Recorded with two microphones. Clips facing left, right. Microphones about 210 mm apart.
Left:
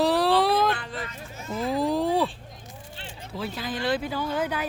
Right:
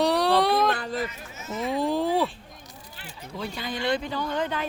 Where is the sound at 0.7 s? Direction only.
40° right (ahead or behind).